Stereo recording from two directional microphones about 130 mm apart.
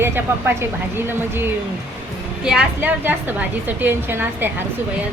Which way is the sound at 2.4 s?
10° right (ahead or behind).